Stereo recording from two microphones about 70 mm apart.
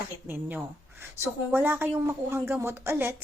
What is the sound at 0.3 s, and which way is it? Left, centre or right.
A woman's voice, right.